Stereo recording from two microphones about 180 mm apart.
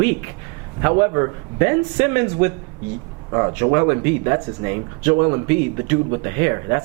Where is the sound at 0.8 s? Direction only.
20° right (ahead or behind).